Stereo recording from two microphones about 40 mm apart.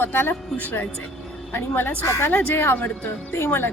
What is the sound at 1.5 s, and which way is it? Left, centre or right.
Speech, left.